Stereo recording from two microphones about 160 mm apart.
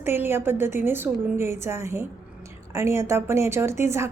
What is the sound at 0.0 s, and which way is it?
A woman's voice, 15° right (ahead or behind).